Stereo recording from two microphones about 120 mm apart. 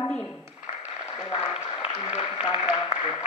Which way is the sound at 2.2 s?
35° left (ahead or behind).